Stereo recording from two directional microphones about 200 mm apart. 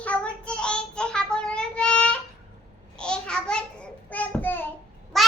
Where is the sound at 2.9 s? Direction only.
5° left (ahead or behind).